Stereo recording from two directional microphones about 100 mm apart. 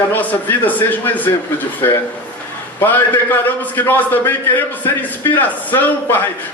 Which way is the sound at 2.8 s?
20° left (ahead or behind).